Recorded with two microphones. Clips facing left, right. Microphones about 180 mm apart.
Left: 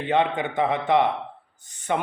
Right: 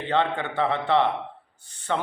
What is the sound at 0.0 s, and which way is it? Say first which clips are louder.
A man's voice: left 2 dB; 15° left (ahead or behind).